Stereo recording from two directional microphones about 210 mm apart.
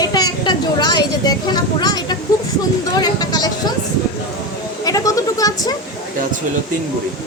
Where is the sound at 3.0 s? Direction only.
20° left (ahead or behind).